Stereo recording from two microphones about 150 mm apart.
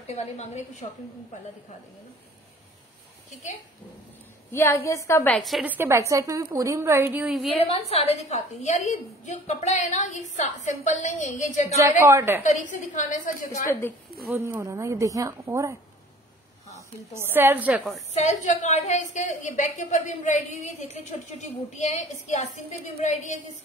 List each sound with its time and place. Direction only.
0.0 s a woman's voice: 45° left (ahead or behind)
4.5 s a woman's voice: 15° left (ahead or behind)
5.3 s a woman's voice: centre (ahead or behind)
5.7 s a woman's voice: 15° right (ahead or behind)
7.2 s a woman's voice: centre (ahead or behind)
7.6 s a woman's voice: 40° left (ahead or behind)
12.0 s a woman's voice: 20° right (ahead or behind)
12.4 s a woman's voice: 55° left (ahead or behind)
13.7 s a woman's voice: 15° left (ahead or behind)
14.2 s speech: 10° right (ahead or behind)
17.1 s a woman's voice: 15° right (ahead or behind)
18.1 s a woman's voice: 50° left (ahead or behind)